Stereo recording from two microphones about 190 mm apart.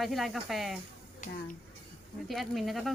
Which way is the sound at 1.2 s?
45° left (ahead or behind).